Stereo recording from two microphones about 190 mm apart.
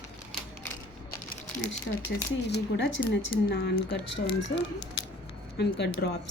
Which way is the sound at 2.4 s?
60° left (ahead or behind).